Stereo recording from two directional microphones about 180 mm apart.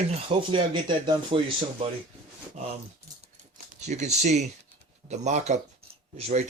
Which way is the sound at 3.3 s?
40° right (ahead or behind).